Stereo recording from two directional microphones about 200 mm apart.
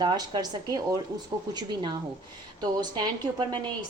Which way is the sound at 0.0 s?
20° right (ahead or behind).